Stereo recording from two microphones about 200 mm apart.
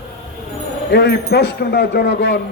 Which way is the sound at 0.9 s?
55° left (ahead or behind).